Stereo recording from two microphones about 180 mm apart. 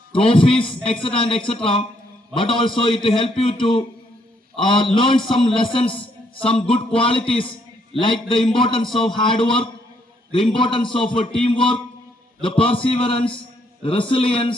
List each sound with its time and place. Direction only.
0.1 s a man's voice: 30° left (ahead or behind)